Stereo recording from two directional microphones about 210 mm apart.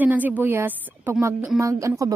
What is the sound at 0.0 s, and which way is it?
A woman's voice, 5° right (ahead or behind).